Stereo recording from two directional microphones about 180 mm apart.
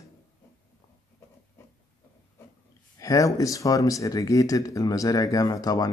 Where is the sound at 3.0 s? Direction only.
20° left (ahead or behind).